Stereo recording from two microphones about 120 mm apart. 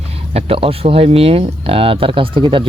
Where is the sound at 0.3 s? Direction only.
55° right (ahead or behind).